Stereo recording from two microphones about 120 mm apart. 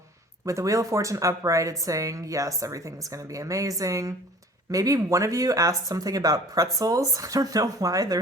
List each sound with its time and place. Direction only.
0.4 s a woman's voice: 25° right (ahead or behind)